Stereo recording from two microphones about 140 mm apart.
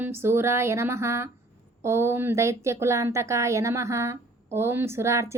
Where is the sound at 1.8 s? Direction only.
20° right (ahead or behind).